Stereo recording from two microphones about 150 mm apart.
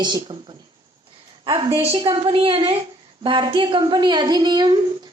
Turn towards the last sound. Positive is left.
turn(degrees=-30)  # may be behind; listen again after turning